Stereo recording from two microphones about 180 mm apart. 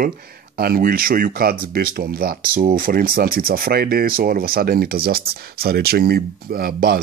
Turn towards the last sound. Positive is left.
turn(degrees=-55)  # may be behind; listen again after turning